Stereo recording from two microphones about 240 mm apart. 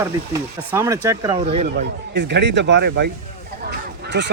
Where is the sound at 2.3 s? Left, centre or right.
Right.